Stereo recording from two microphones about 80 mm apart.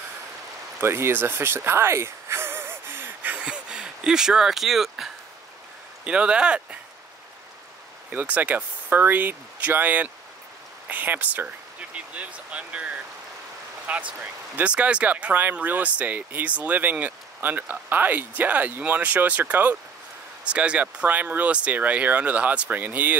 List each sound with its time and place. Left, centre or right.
0.7 s a sound: right
3.4 s speech: centre
6.0 s speech: centre
8.1 s speech: right